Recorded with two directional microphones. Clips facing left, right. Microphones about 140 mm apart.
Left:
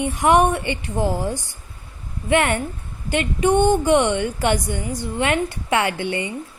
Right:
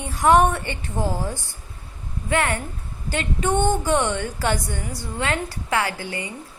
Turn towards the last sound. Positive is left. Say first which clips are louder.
# left 5 dB
turn(degrees=25)  # may be behind; listen again after turning